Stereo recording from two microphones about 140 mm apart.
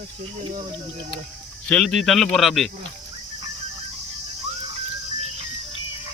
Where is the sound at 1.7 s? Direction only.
5° left (ahead or behind).